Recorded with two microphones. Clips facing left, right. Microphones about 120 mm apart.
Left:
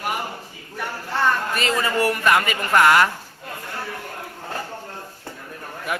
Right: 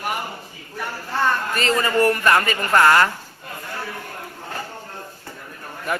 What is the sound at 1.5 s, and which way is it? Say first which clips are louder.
A man's voice: right 2 dB; 5° left (ahead or behind).